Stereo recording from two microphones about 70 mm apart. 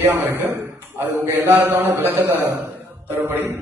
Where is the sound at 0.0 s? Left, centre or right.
Right.